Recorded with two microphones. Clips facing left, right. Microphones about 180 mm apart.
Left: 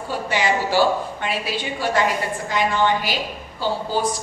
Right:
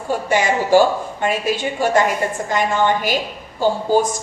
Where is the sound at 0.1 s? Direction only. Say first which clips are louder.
Right 4 dB; 45° right (ahead or behind).